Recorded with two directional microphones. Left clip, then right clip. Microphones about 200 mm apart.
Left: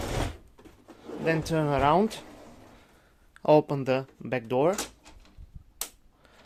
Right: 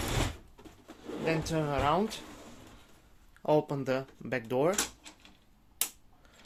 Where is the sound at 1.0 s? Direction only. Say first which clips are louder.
Left 4 dB; 50° left (ahead or behind).